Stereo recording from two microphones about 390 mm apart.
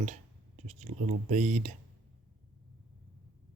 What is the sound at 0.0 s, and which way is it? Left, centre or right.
Speech, centre.